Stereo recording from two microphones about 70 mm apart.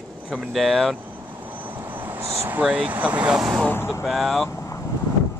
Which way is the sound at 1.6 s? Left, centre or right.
Right.